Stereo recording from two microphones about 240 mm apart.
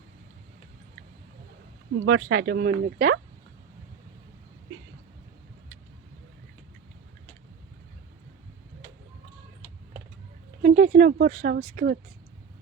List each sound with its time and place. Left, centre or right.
2.0 s speech: right
10.6 s a sound: right
11.5 s speech: right